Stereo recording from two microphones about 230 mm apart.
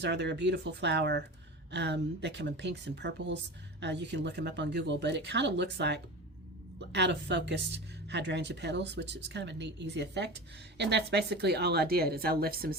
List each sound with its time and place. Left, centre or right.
0.0 s speech: right